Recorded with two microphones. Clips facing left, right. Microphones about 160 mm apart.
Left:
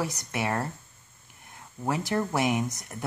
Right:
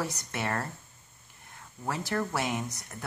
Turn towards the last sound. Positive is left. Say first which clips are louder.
# left 5 dB
turn(degrees=20)  # may be behind; listen again after turning